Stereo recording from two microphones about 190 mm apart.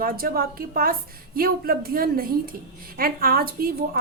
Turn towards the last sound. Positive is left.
turn(degrees=-50)  # may be behind; listen again after turning